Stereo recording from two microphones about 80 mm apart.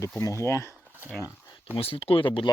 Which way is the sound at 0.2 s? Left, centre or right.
Left.